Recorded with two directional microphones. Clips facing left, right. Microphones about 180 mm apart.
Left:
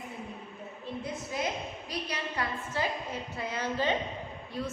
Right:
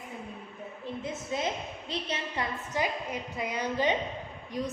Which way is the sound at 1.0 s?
25° right (ahead or behind).